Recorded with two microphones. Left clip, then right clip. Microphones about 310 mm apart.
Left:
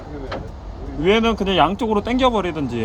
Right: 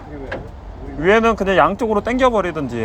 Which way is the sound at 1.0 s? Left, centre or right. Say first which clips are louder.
Right 3 dB; centre.